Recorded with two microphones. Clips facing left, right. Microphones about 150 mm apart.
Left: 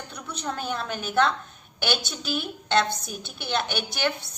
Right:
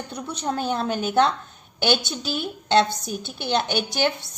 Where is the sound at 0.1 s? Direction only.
30° right (ahead or behind).